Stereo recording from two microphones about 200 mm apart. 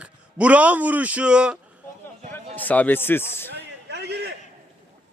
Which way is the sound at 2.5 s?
10° left (ahead or behind).